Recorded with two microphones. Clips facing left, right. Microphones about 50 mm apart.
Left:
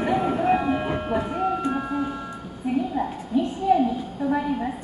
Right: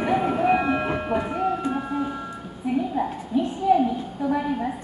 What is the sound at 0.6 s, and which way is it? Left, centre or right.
Train, right.